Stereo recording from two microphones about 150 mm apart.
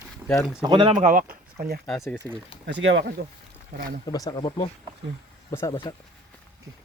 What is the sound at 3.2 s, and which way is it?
Speech, 90° right.